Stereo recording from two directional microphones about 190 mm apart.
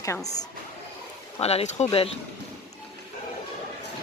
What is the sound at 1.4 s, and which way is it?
Speech, 35° left (ahead or behind).